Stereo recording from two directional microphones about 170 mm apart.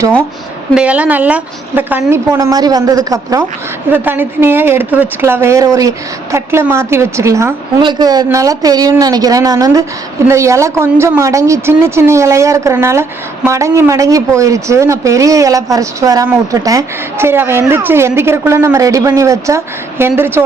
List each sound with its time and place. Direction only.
0.7 s a woman's voice: 5° right (ahead or behind)